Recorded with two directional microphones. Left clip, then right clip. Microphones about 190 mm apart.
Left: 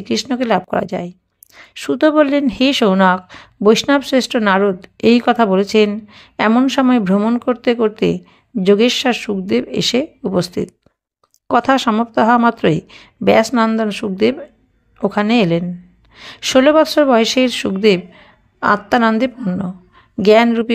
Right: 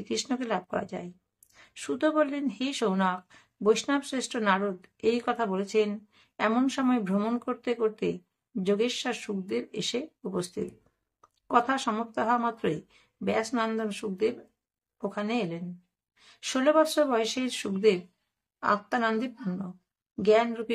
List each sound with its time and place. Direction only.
0.0 s a woman's voice: 40° left (ahead or behind)
7.2 s speech: 30° left (ahead or behind)
7.4 s a woman's voice: 45° left (ahead or behind)